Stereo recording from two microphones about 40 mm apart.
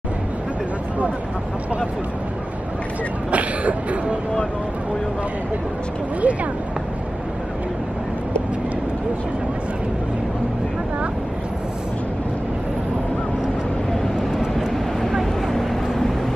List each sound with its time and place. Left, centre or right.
3.3 s speech: right
6.2 s speech: right
15.5 s vehicle: centre